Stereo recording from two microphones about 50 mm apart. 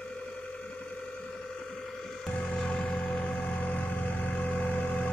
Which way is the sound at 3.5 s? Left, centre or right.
Left.